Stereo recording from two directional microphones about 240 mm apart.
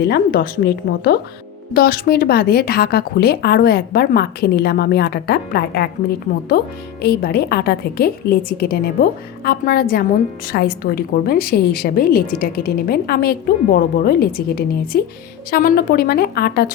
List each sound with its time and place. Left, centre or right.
0.0 s speech: left